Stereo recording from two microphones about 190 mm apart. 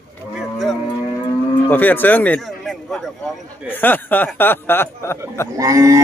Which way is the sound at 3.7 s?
10° left (ahead or behind).